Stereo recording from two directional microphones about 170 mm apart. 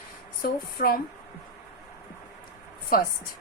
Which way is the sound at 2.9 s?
60° left (ahead or behind).